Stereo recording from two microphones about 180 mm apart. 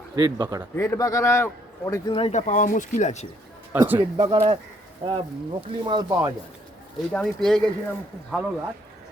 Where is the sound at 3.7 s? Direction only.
10° right (ahead or behind).